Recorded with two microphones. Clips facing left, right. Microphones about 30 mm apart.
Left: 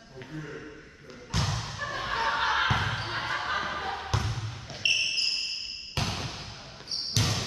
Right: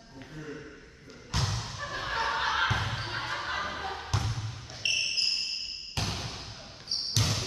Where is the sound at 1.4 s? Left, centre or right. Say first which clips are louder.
Left 2 dB; centre.